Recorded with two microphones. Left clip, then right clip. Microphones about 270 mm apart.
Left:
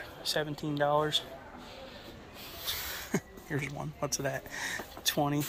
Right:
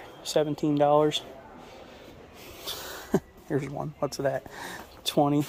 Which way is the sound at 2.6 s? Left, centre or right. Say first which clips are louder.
Right 1 dB; right.